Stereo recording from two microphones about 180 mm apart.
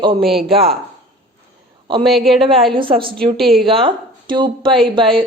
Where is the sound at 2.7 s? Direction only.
30° right (ahead or behind).